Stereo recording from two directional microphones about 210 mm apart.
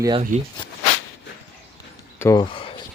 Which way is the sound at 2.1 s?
15° left (ahead or behind).